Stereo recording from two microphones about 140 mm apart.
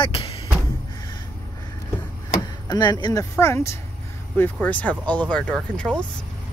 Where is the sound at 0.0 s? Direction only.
40° left (ahead or behind).